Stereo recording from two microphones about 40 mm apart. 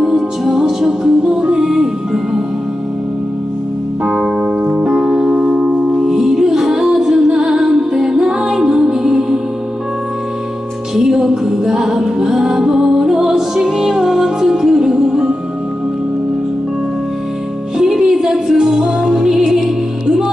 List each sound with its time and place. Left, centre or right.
0.0 s music: centre
4.0 s keyboard: centre
5.9 s music: centre
11.0 s music: centre
17.7 s music: centre
19.3 s music: centre